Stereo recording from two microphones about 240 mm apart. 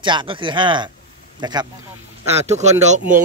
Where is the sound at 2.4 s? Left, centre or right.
Right.